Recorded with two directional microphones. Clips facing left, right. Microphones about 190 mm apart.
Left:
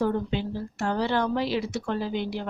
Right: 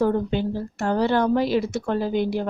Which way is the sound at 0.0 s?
50° right (ahead or behind).